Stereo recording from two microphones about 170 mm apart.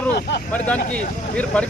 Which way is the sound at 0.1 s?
70° left (ahead or behind).